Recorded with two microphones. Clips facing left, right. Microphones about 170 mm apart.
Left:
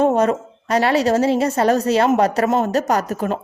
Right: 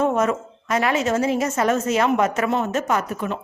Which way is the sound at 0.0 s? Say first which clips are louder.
Left 4 dB; 35° left (ahead or behind).